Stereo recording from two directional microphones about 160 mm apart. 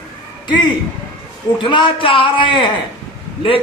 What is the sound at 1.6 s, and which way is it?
Speech, 30° left (ahead or behind).